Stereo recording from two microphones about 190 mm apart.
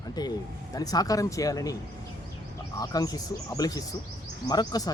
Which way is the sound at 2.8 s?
20° left (ahead or behind).